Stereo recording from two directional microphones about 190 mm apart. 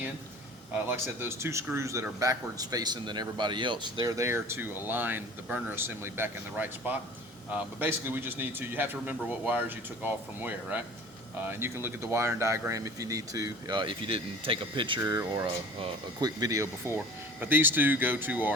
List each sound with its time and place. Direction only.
0.9 s speech: 15° right (ahead or behind)